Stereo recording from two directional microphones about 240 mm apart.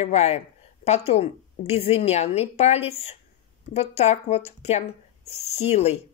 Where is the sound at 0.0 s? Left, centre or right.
Left.